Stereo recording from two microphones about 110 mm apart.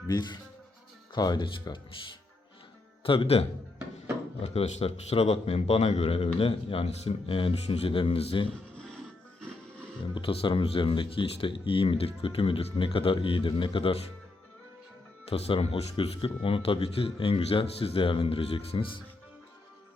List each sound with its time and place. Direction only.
0.1 s speech: 40° left (ahead or behind)
3.0 s speech: 55° left (ahead or behind)
4.4 s speech: 75° left (ahead or behind)
7.3 s speech: 55° left (ahead or behind)
10.2 s speech: 50° left (ahead or behind)
15.3 s speech: 60° left (ahead or behind)